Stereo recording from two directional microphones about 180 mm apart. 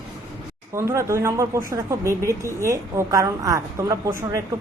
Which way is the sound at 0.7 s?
15° right (ahead or behind).